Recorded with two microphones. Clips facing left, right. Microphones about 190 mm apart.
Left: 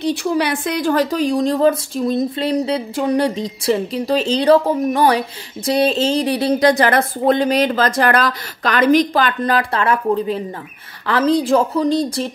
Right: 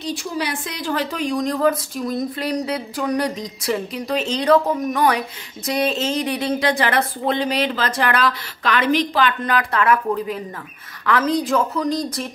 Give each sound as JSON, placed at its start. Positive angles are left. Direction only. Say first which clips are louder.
{"t": 0.0, "sound": "a woman's voice", "louder": "left 7 dB", "side_deg": 65}
{"t": 1.1, "sound": "a woman's voice", "louder": "left 5 dB", "side_deg": 30}